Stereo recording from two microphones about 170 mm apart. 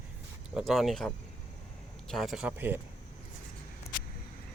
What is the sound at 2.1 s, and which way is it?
Speech, centre (ahead or behind).